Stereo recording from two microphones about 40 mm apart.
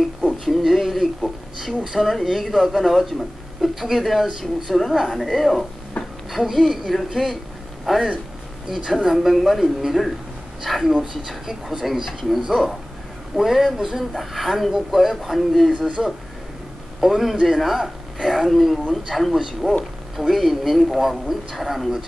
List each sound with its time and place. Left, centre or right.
0.3 s a sound: centre
2.0 s a man's voice: centre
6.0 s a sound: left
6.3 s a man's voice: centre
13.4 s a man's voice: centre
17.0 s a man's voice: centre
19.6 s speech: right
20.2 s a man's voice: centre